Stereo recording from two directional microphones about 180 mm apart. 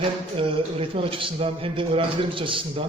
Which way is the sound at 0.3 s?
30° right (ahead or behind).